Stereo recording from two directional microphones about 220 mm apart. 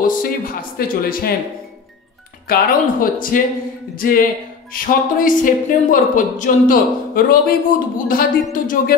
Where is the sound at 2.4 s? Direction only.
40° left (ahead or behind).